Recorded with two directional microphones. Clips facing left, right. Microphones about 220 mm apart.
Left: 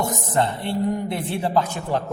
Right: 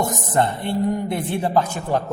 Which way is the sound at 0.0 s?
50° right (ahead or behind).